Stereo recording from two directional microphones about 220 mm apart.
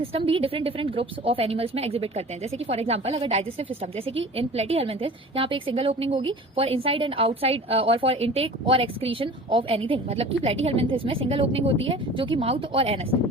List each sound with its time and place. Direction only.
0.0 s a woman's voice: 25° right (ahead or behind)